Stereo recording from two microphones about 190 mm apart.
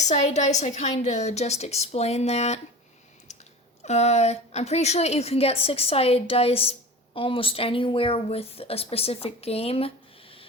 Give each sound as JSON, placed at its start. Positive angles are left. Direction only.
{"t": 0.0, "sound": "a woman's voice", "side_deg": 35}
{"t": 3.8, "sound": "a woman's voice", "side_deg": 35}